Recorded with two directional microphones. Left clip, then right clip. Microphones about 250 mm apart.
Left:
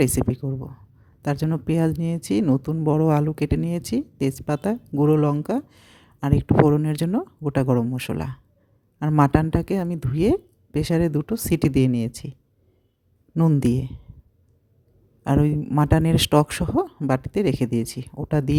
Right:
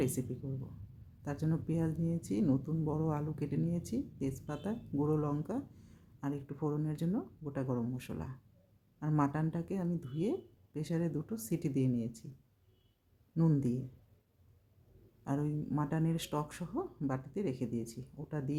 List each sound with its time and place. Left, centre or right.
0.0 s speech: left
13.3 s speech: left
15.2 s speech: left